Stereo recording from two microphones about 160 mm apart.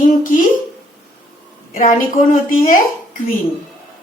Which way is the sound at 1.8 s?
55° left (ahead or behind).